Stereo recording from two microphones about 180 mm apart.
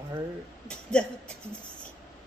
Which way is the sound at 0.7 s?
5° left (ahead or behind).